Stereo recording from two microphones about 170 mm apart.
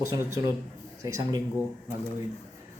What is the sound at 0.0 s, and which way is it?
Speech, 20° right (ahead or behind).